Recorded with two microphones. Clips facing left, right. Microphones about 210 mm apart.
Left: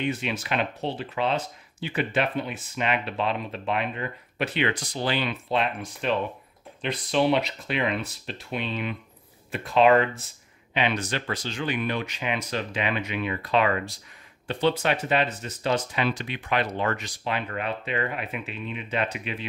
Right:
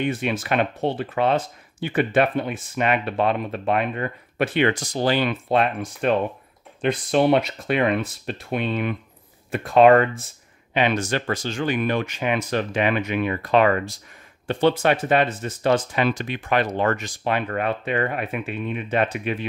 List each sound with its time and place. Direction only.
0.0 s speech: 50° right (ahead or behind)